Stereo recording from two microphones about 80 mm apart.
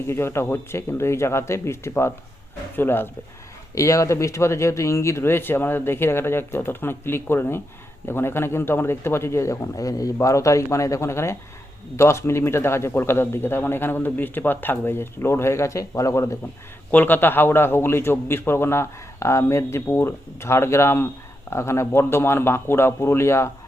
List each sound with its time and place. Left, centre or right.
0.1 s speech: left
3.8 s speech: left
16.9 s speech: left